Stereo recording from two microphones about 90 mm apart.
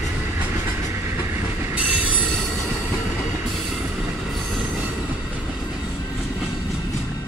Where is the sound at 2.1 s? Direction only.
5° left (ahead or behind).